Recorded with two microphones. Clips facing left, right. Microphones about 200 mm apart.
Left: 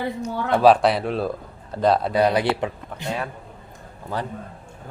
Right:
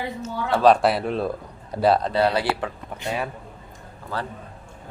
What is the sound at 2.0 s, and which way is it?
Speech, 15° left (ahead or behind).